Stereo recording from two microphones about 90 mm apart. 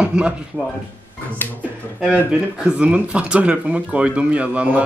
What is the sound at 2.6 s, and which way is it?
A man's voice, 15° right (ahead or behind).